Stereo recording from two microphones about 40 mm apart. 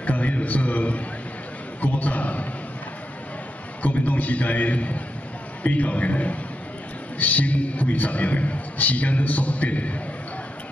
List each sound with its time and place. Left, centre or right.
0.0 s a man's voice: left
3.8 s a man's voice: left